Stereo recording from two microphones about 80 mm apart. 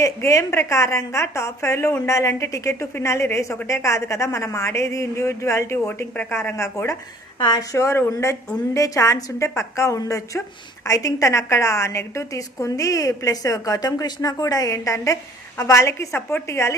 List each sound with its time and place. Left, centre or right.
0.0 s a woman's voice: left
6.6 s a woman's voice: left
7.3 s a woman's voice: left